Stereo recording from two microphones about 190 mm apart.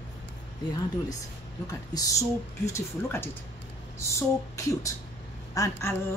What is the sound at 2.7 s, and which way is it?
A woman's voice, 10° left (ahead or behind).